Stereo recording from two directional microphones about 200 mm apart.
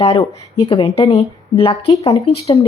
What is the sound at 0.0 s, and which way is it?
A woman's voice, 25° left (ahead or behind).